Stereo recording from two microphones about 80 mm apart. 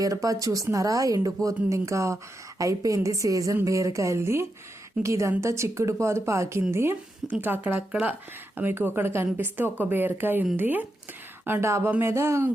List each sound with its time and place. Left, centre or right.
0.0 s a woman's voice: right